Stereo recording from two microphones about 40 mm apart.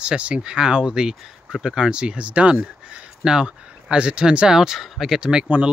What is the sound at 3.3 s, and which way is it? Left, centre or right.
Speech, right.